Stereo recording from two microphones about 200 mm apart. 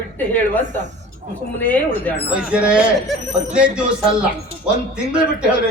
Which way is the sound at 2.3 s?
5° right (ahead or behind).